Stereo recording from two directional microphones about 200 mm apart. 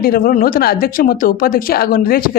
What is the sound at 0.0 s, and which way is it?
A woman's voice, 45° left (ahead or behind).